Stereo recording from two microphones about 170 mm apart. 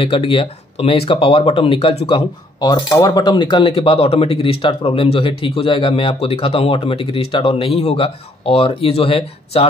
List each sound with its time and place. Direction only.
0.0 s speech: 30° left (ahead or behind)